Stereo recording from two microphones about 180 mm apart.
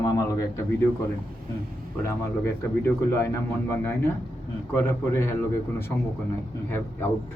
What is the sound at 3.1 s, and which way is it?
Speech, 15° left (ahead or behind).